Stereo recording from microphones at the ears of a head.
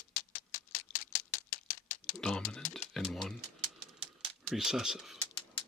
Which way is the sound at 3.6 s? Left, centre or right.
Right.